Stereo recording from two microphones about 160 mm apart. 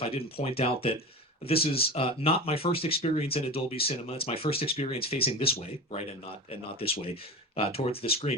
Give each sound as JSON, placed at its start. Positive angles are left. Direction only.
{"t": 0.0, "sound": "speech", "side_deg": 35}